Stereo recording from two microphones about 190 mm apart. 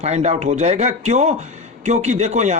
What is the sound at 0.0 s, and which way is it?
Speech, 35° right (ahead or behind).